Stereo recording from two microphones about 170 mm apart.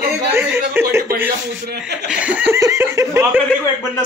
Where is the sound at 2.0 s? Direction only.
5° right (ahead or behind).